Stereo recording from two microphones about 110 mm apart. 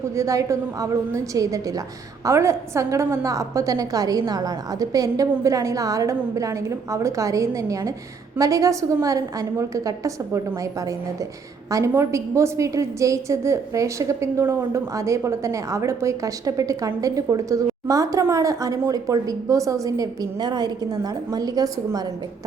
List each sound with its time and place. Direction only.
0.2 s a woman's voice: 30° right (ahead or behind)